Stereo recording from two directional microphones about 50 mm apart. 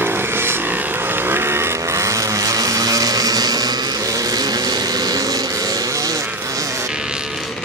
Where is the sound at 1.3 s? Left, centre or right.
Right.